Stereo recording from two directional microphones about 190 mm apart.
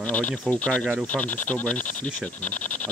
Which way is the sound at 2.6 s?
40° left (ahead or behind).